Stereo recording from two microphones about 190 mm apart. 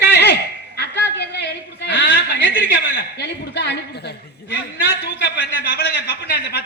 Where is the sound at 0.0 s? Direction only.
60° left (ahead or behind).